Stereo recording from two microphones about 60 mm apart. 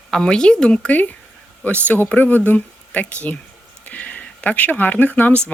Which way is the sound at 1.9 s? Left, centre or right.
Left.